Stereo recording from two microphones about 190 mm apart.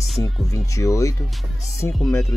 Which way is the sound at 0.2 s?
15° left (ahead or behind).